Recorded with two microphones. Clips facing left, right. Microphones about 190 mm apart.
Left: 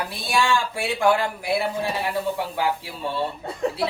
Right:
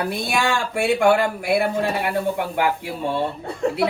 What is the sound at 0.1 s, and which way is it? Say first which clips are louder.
A man's voice: right 1 dB; 55° right (ahead or behind).